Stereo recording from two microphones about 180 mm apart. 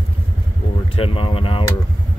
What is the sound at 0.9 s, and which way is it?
Speech, 30° left (ahead or behind).